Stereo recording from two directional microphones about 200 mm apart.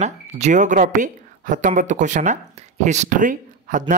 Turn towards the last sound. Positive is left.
turn(degrees=-40)  # may be behind; listen again after turning